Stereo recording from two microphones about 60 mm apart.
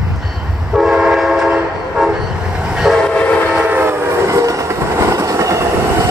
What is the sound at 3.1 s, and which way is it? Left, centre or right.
Train, left.